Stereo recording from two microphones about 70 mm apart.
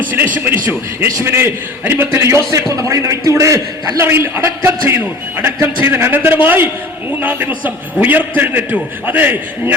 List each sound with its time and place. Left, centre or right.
0.1 s a man's voice: right